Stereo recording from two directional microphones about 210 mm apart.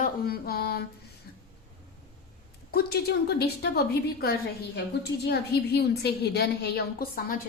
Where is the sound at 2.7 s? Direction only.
50° left (ahead or behind).